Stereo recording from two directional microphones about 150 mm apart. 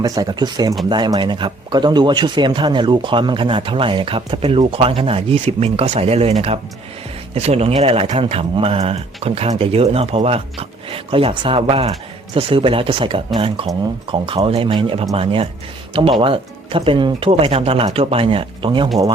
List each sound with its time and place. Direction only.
0.0 s speech: 25° right (ahead or behind)